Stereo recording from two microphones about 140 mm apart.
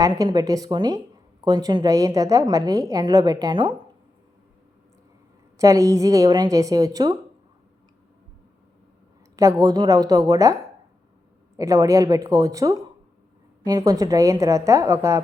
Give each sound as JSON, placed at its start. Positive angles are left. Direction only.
{"t": 0.0, "sound": "a woman's voice", "side_deg": -30}
{"t": 5.5, "sound": "a woman's voice", "side_deg": -20}
{"t": 9.3, "sound": "a woman's voice", "side_deg": -25}